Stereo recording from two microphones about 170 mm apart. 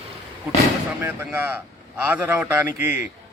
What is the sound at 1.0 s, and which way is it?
A man's voice, 10° right (ahead or behind).